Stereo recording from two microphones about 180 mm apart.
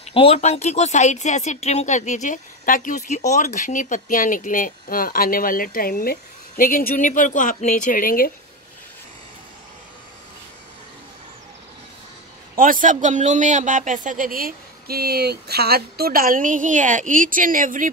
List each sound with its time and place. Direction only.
0.1 s speech: 35° left (ahead or behind); by 8.3 s 50° left (ahead or behind)
12.5 s a man's voice: 50° right (ahead or behind)